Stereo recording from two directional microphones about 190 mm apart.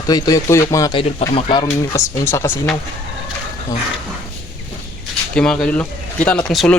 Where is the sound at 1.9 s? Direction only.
15° left (ahead or behind).